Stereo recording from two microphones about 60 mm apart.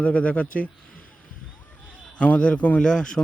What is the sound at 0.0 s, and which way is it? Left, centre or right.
Speech, left.